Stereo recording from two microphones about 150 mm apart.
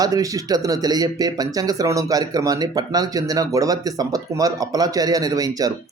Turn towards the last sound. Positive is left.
turn(degrees=-25)  # may be behind; listen again after turning